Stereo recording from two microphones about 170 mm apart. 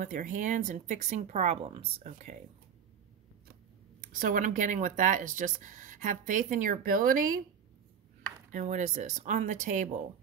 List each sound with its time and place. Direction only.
0.0 s speech: 50° right (ahead or behind); by 2.0 s 35° right (ahead or behind)
2.0 s speech: 45° right (ahead or behind)
4.0 s speech: 55° right (ahead or behind)
8.5 s speech: 45° right (ahead or behind)